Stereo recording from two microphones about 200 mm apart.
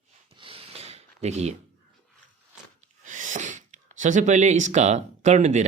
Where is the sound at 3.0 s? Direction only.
40° right (ahead or behind).